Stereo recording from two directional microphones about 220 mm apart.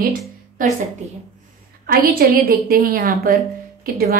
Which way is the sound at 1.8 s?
40° right (ahead or behind).